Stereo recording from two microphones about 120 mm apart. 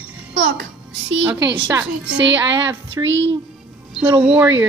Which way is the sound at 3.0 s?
20° right (ahead or behind).